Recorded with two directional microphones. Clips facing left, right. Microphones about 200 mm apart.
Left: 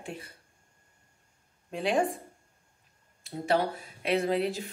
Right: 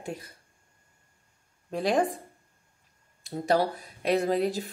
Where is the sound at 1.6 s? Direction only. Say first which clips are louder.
Right 2 dB; 40° right (ahead or behind).